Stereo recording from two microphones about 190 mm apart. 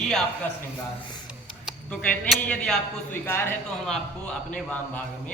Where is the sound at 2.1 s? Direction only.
5° left (ahead or behind).